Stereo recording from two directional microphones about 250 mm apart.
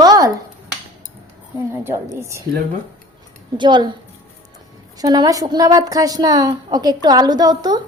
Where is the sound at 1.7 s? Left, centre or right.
Centre.